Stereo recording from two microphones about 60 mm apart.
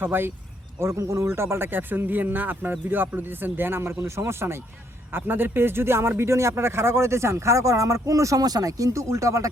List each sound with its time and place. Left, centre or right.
0.0 s speech: right
0.8 s a man's voice: right